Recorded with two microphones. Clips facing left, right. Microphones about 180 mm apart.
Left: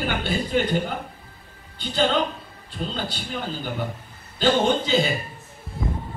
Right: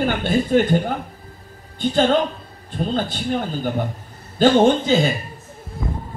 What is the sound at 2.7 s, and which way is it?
A woman's voice, 45° right (ahead or behind).